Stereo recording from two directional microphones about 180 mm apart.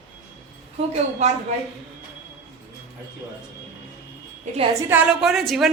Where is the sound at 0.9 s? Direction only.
40° right (ahead or behind).